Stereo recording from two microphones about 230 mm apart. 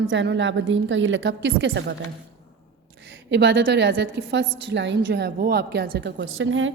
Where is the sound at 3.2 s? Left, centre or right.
Right.